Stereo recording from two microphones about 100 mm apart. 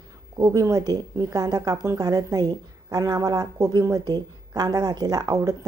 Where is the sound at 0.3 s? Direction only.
35° right (ahead or behind).